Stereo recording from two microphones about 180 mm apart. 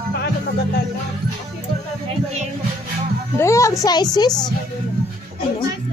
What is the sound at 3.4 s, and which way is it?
A child's voice, 15° left (ahead or behind).